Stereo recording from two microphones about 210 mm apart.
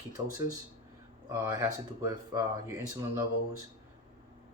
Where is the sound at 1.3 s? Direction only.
10° right (ahead or behind).